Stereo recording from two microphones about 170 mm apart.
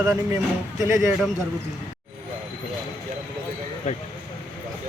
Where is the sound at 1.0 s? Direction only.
Centre (ahead or behind).